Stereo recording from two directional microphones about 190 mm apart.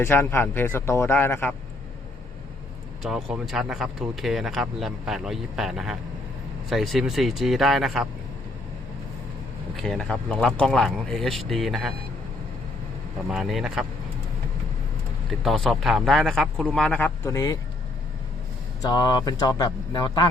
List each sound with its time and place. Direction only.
0.0 s a man's voice: 10° left (ahead or behind)
3.0 s speech: centre (ahead or behind)
9.7 s speech: centre (ahead or behind)
13.3 s speech: centre (ahead or behind)
15.4 s speech: centre (ahead or behind); by 17.6 s 15° left (ahead or behind)
18.8 s speech: 20° left (ahead or behind)